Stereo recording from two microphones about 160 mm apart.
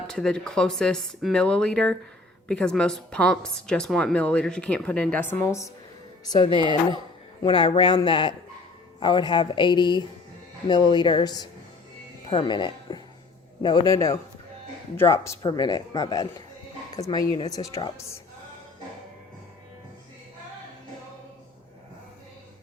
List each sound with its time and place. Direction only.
0.1 s speech: 5° left (ahead or behind)
6.4 s speech: 30° left (ahead or behind)